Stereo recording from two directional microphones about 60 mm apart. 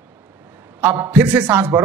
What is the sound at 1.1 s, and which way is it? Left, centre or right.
Speech, right.